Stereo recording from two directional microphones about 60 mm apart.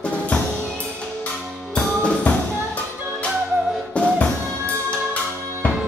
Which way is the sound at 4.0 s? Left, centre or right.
Centre.